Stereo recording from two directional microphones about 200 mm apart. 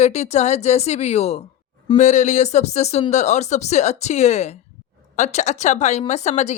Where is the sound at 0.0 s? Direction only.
35° left (ahead or behind).